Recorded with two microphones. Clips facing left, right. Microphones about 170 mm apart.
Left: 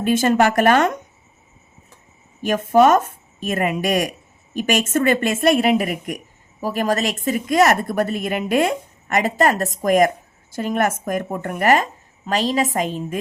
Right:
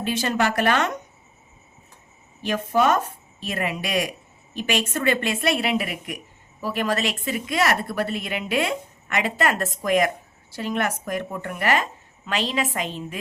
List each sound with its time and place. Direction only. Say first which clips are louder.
0.0 s a woman's voice: left 7 dB; 50° left (ahead or behind)
2.4 s a woman's voice: left 7 dB; 45° left (ahead or behind)